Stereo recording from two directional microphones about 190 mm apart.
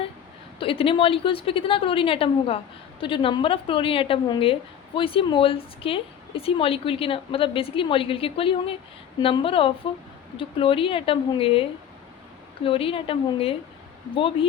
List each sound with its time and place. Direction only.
0.6 s a woman's voice: 30° left (ahead or behind)
12.6 s a woman's voice: 30° left (ahead or behind)